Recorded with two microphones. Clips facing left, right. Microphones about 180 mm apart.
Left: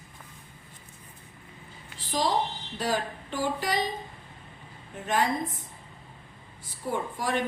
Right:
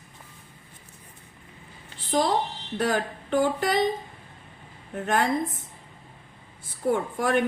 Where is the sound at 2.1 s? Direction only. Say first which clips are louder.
Right 3 dB; 60° right (ahead or behind).